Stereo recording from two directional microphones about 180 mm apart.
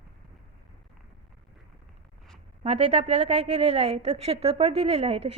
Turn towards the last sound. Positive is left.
turn(degrees=-35)  # may be behind; listen again after turning